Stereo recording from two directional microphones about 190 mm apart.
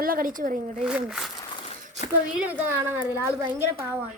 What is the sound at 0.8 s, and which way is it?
Speech, 5° right (ahead or behind).